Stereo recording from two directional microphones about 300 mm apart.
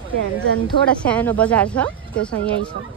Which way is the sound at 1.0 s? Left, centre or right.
Centre.